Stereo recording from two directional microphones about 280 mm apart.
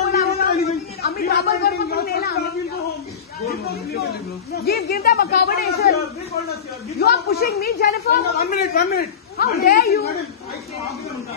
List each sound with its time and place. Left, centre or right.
0.1 s a sound: left
4.6 s a woman's voice: left
7.0 s a woman's voice: left